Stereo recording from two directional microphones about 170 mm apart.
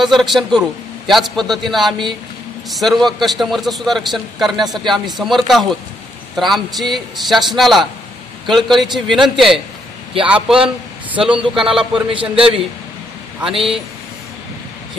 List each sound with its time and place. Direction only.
0.2 s a man's voice: centre (ahead or behind)
11.9 s a man's voice: 30° right (ahead or behind)
13.4 s a man's voice: centre (ahead or behind)